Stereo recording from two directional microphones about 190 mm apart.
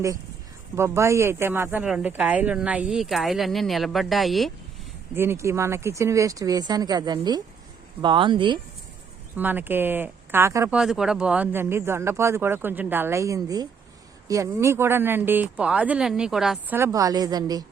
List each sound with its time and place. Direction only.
0.8 s speech: 15° right (ahead or behind)
5.1 s speech: 10° right (ahead or behind)
9.3 s speech: 10° right (ahead or behind)
10.8 s speech: 5° right (ahead or behind); by 17.7 s 20° right (ahead or behind)